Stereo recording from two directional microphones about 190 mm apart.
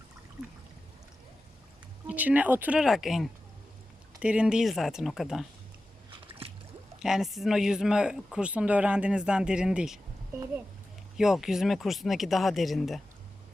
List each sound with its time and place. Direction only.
2.0 s speech: 10° right (ahead or behind)
6.1 s squish: 30° right (ahead or behind)
7.0 s speech: centre (ahead or behind)